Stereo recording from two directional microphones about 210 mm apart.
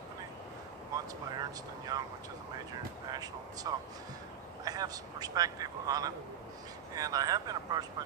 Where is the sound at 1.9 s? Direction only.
15° right (ahead or behind).